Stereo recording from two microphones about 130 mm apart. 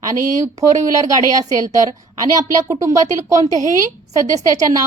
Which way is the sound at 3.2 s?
25° right (ahead or behind).